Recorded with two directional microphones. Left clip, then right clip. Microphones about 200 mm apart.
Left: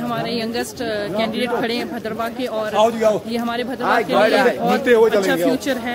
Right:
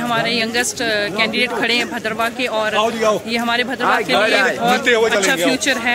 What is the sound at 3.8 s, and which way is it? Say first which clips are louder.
Speech: left 2 dB; 40° right (ahead or behind).